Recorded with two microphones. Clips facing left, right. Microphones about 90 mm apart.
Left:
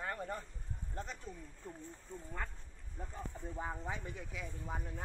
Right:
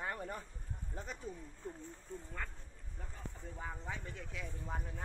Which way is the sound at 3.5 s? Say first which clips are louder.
Left 5 dB; 25° left (ahead or behind).